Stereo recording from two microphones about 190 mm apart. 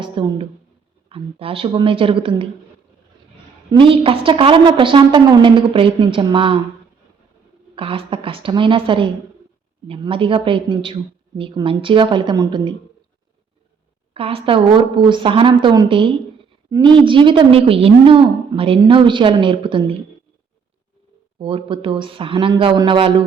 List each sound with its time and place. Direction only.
0.0 s a sound: 25° right (ahead or behind)
1.1 s a woman's voice: 30° right (ahead or behind)
3.7 s a woman's voice: 25° right (ahead or behind)
7.8 s a woman's voice: 30° right (ahead or behind)
14.1 s a woman's voice: 30° right (ahead or behind)
21.3 s a woman's voice: 25° right (ahead or behind)